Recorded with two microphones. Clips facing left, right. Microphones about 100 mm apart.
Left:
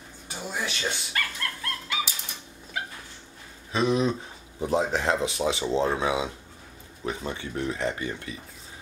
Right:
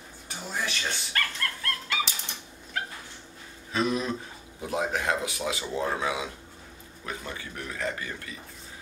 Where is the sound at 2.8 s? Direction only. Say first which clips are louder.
Even; 10° left (ahead or behind).